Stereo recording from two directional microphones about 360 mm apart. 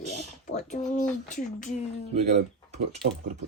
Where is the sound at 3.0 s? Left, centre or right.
Centre.